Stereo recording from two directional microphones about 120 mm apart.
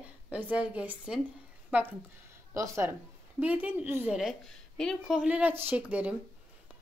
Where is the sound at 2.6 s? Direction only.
25° right (ahead or behind).